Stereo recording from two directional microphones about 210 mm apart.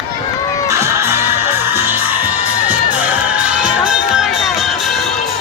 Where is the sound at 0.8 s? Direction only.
10° right (ahead or behind).